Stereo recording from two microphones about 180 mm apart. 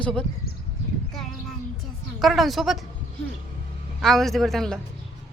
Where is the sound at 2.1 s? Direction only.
Centre (ahead or behind).